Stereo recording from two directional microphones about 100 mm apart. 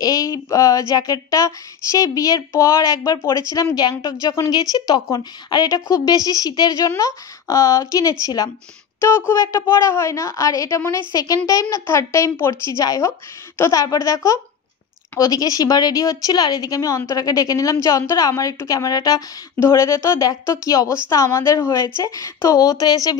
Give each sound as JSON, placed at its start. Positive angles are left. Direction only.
{"t": 0.0, "sound": "speech", "side_deg": 35}
{"t": 19.6, "sound": "speech", "side_deg": 30}